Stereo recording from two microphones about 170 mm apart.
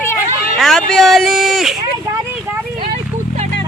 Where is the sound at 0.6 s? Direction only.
5° left (ahead or behind).